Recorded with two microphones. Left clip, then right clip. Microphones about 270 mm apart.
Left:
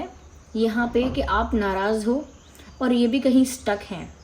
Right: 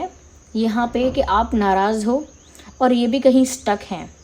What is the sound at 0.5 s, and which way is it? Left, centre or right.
A woman's voice, right.